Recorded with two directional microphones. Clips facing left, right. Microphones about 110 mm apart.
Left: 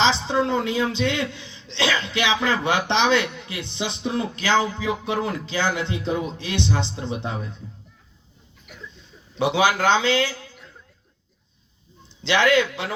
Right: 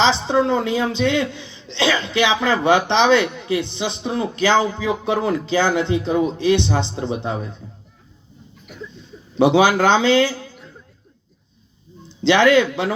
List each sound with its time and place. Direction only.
0.0 s a woman's voice: 25° right (ahead or behind)
9.4 s a man's voice: 25° right (ahead or behind)
12.2 s a woman's voice: 25° right (ahead or behind)